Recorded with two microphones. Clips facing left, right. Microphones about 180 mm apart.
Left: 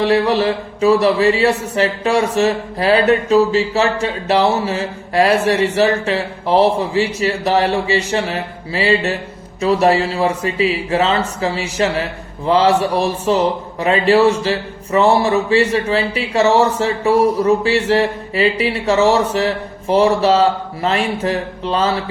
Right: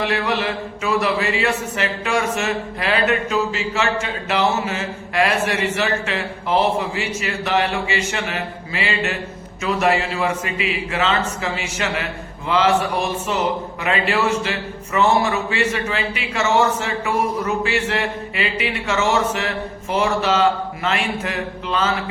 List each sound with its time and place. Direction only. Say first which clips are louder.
0.0 s a man's voice: left 7 dB; 35° left (ahead or behind)